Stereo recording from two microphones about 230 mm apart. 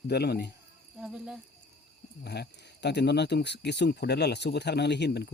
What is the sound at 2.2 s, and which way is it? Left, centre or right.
Speech, left.